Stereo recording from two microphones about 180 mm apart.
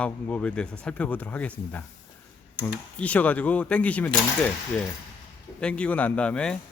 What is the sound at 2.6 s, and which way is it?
Speech, 5° left (ahead or behind).